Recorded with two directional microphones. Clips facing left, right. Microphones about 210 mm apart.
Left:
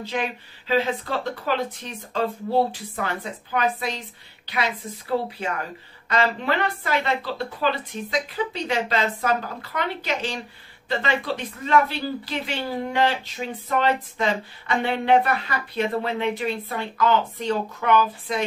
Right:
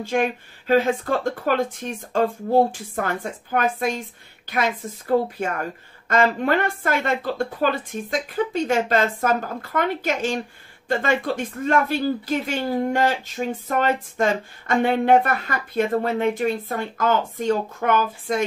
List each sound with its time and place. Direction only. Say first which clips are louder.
0.0 s speech: right 6 dB; 50° right (ahead or behind)